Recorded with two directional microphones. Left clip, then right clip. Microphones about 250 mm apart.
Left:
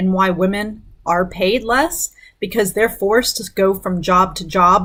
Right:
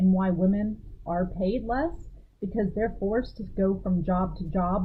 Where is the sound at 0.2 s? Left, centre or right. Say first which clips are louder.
Left 12 dB; centre.